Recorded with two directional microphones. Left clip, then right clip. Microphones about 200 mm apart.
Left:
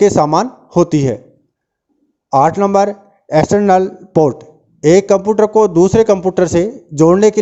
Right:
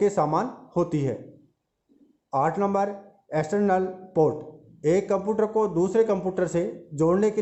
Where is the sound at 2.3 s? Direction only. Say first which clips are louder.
Left 13 dB; 45° left (ahead or behind).